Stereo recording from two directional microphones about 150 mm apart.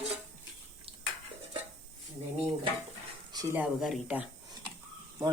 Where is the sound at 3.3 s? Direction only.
25° right (ahead or behind).